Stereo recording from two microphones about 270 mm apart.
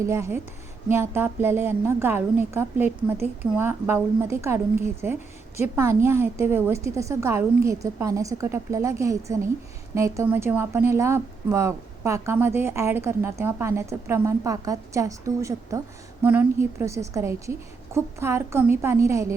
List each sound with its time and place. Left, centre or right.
0.0 s speech: centre